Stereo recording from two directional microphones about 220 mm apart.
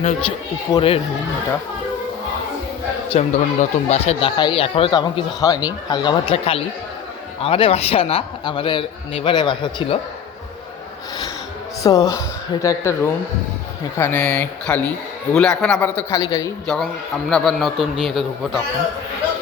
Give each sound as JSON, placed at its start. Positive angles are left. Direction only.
{"t": 0.7, "sound": "speech", "side_deg": 25}
{"t": 3.1, "sound": "speech", "side_deg": 30}
{"t": 11.8, "sound": "a man's voice", "side_deg": 15}
{"t": 14.0, "sound": "a man's voice", "side_deg": 5}
{"t": 16.6, "sound": "a man's voice", "side_deg": 0}